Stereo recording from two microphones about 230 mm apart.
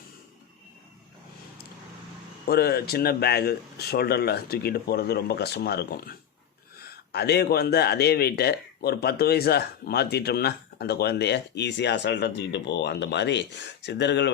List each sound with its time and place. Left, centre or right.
2.5 s speech: left